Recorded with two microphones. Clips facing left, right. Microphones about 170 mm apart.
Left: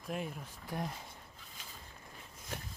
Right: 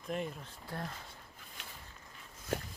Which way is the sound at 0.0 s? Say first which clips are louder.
Right 2 dB; 5° left (ahead or behind).